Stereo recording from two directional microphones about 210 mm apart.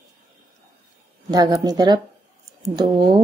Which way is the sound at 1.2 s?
20° right (ahead or behind).